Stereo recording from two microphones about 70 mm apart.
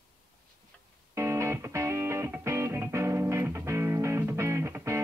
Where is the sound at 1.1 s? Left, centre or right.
Right.